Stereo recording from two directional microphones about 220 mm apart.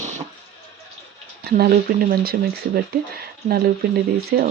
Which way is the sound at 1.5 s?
45° right (ahead or behind).